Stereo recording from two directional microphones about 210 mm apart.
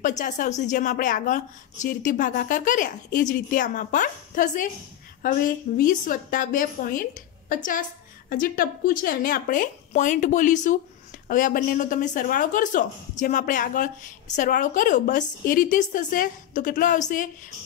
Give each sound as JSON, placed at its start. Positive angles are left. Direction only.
{"t": 0.2, "sound": "a woman's voice", "side_deg": 35}